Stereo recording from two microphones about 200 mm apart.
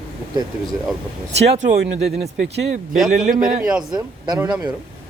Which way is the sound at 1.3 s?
35° right (ahead or behind).